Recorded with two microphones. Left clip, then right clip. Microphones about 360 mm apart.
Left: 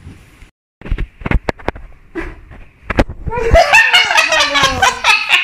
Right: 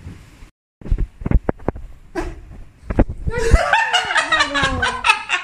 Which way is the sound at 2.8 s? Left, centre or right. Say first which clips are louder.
Left 5 dB; left.